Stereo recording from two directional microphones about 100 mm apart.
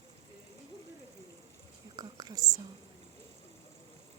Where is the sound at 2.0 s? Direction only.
40° right (ahead or behind).